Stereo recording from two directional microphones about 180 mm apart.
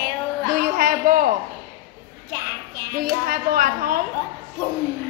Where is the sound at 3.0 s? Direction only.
50° right (ahead or behind).